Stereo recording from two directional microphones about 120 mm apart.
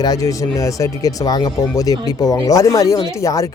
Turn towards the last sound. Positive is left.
turn(degrees=30)  # may be behind; listen again after turning